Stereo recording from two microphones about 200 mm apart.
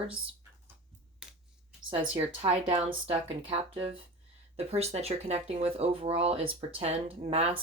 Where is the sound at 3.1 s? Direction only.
30° right (ahead or behind).